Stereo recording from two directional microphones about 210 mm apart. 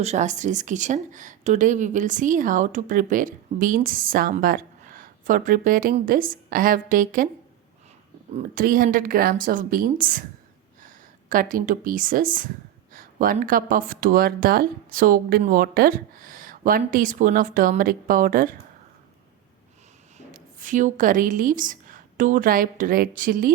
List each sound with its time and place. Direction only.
0.0 s speech: 35° right (ahead or behind)
8.3 s speech: 35° right (ahead or behind)
20.1 s a woman's voice: 40° right (ahead or behind)